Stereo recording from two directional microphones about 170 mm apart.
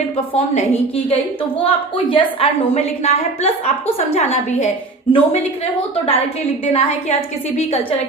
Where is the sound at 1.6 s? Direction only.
30° left (ahead or behind).